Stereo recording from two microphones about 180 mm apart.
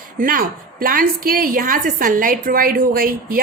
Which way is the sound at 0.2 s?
50° right (ahead or behind).